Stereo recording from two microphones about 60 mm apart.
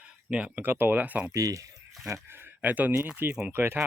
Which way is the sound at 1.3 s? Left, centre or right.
Right.